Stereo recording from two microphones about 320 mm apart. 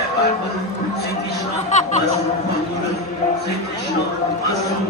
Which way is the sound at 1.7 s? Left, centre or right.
Left.